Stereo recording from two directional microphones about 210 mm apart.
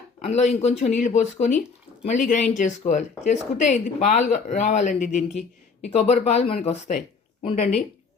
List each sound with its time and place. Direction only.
0.2 s speech: 30° left (ahead or behind)